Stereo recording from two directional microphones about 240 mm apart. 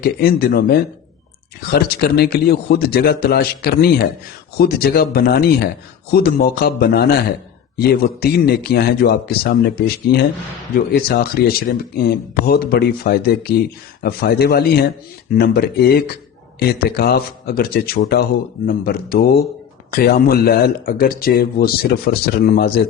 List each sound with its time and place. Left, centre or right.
0.0 s speech: left